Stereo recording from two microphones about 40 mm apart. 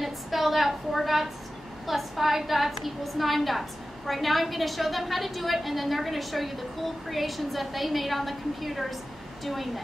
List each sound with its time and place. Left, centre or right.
0.0 s a woman's voice: centre